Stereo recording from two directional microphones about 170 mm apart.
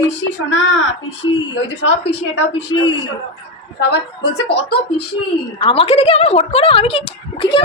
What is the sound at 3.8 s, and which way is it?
Speech, 75° left (ahead or behind).